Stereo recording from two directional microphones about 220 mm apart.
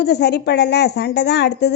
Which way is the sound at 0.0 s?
50° left (ahead or behind).